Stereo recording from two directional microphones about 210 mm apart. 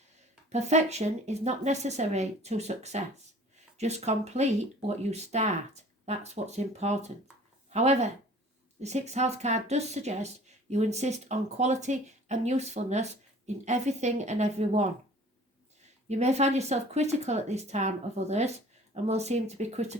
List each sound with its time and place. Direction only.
0.5 s speech: 35° right (ahead or behind)
16.0 s speech: 30° right (ahead or behind)